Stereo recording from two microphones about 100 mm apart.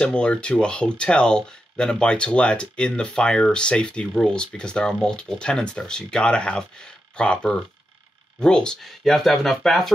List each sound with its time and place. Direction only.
0.0 s speech: 10° left (ahead or behind)